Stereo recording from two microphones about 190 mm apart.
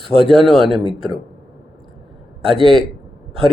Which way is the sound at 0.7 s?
30° right (ahead or behind).